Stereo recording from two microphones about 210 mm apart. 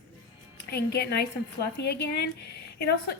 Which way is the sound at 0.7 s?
50° left (ahead or behind).